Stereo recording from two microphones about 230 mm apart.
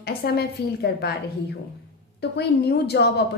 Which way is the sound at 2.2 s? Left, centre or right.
Left.